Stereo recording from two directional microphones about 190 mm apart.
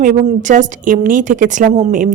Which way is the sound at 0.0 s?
45° right (ahead or behind).